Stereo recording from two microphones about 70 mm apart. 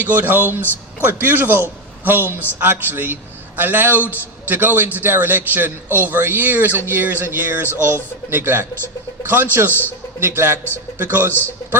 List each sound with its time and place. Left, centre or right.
0.0 s a man's voice: right